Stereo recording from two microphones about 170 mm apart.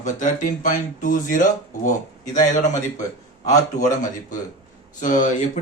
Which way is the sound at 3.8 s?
50° left (ahead or behind).